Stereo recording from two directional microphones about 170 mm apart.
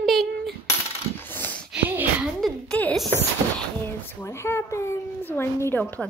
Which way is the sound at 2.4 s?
5° left (ahead or behind).